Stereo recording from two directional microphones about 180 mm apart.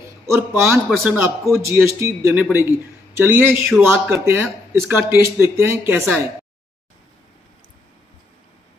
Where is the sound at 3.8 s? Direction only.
15° right (ahead or behind).